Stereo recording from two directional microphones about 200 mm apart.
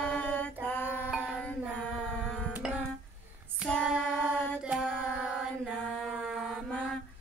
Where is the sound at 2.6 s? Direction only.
5° right (ahead or behind).